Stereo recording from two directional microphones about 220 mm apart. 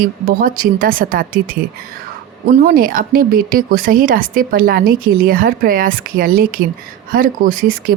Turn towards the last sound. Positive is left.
turn(degrees=-40)  # may be behind; listen again after turning